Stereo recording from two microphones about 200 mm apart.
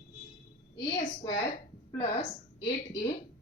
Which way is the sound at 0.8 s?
20° left (ahead or behind).